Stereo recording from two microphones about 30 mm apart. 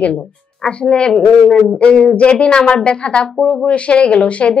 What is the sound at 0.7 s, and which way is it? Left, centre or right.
Speech, left.